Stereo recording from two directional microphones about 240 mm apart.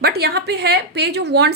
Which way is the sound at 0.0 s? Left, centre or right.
Right.